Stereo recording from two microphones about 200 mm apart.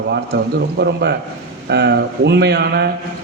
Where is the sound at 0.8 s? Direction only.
55° right (ahead or behind).